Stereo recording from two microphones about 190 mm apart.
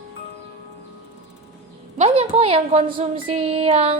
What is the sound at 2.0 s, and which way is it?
A woman's voice, 30° right (ahead or behind).